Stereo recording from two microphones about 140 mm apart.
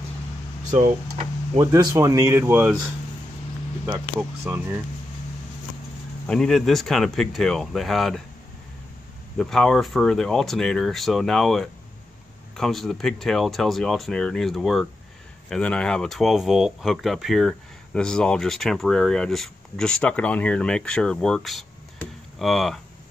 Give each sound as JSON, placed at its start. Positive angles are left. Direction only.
{"t": 0.7, "sound": "speech", "side_deg": -60}
{"t": 1.6, "sound": "speech", "side_deg": -25}
{"t": 4.2, "sound": "speech", "side_deg": -10}
{"t": 6.2, "sound": "speech", "side_deg": 5}
{"t": 9.4, "sound": "speech", "side_deg": 5}